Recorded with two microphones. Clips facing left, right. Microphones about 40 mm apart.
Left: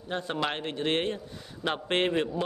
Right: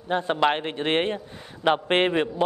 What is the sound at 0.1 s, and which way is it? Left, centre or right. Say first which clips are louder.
A man's voice: right 8 dB; right.